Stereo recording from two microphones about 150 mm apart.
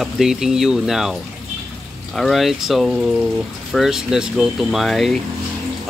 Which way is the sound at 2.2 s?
Centre (ahead or behind).